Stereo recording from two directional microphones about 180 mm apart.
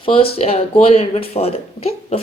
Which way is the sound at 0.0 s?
30° left (ahead or behind).